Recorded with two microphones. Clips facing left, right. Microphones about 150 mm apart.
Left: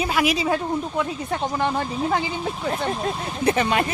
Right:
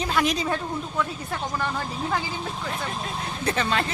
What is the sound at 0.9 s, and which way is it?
Speech, 20° left (ahead or behind).